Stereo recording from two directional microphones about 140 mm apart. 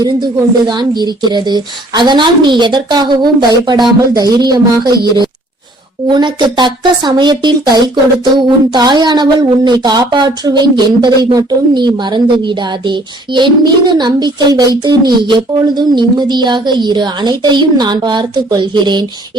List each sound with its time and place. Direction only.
0.7 s speech: 30° right (ahead or behind)
6.1 s speech: 30° right (ahead or behind)